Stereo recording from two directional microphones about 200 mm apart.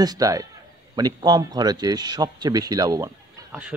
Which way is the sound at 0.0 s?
20° right (ahead or behind).